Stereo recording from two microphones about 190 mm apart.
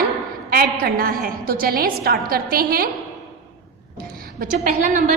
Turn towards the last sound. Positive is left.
turn(degrees=-50)  # may be behind; listen again after turning